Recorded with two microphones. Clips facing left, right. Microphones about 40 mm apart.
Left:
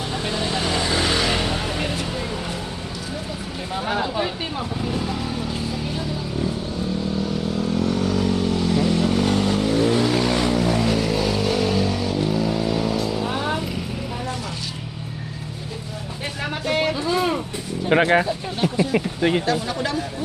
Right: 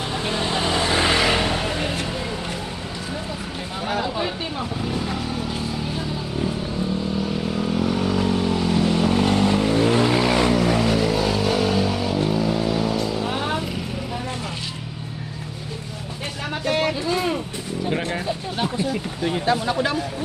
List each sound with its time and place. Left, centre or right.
0.1 s vehicle: centre
3.8 s a sound: centre
4.8 s vehicle: centre
7.2 s vehicle: centre
16.6 s a sound: centre
17.2 s vehicle: left
17.8 s a sound: left
18.9 s speech: left
19.5 s speech: right